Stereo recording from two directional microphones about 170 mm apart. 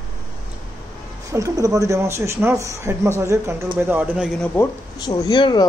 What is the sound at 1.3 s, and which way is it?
Speech, 20° right (ahead or behind).